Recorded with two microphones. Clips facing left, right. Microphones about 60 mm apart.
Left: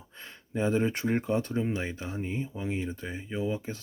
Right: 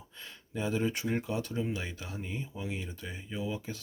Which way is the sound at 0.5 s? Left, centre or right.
Left.